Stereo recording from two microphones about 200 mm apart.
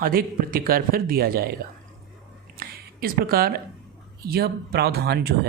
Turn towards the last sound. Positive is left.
turn(degrees=-50)  # may be behind; listen again after turning